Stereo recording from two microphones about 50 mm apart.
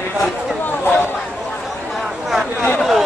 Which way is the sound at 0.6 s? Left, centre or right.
Left.